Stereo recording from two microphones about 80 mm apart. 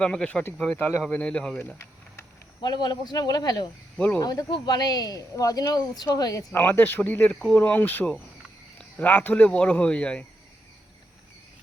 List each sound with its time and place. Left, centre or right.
0.0 s speech: centre
2.6 s speech: left
3.9 s speech: centre
4.2 s speech: left
6.5 s speech: left